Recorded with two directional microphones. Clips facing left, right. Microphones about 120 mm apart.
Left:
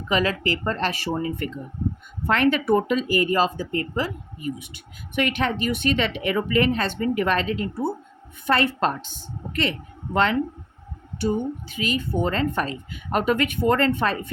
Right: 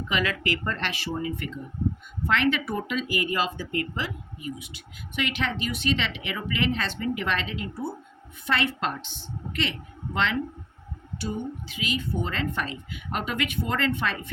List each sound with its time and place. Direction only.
0.1 s a woman's voice: 35° left (ahead or behind)
11.8 s a woman's voice: 45° left (ahead or behind)